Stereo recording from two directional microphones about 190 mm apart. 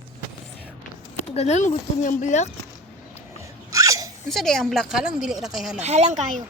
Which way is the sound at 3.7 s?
20° right (ahead or behind).